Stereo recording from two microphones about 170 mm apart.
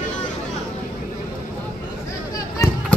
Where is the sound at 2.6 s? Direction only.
20° left (ahead or behind).